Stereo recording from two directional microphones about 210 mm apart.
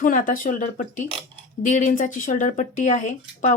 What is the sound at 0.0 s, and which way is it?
Speech, 40° left (ahead or behind).